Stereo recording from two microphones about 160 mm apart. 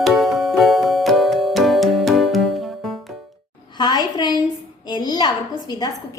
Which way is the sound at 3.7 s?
25° left (ahead or behind).